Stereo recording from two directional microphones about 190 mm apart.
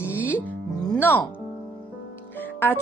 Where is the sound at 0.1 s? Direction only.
10° right (ahead or behind).